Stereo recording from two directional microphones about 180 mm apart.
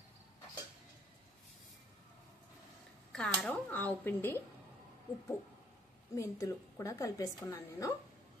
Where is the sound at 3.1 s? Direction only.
5° left (ahead or behind).